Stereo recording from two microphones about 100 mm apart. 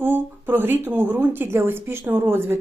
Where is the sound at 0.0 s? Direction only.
20° right (ahead or behind).